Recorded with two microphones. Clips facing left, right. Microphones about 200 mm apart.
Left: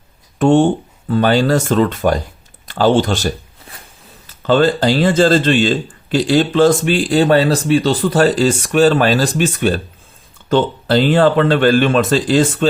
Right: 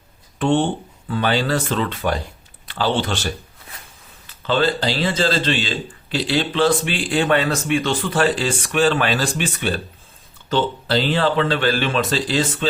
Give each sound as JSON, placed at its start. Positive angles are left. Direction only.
{"t": 0.3, "sound": "speech", "side_deg": 45}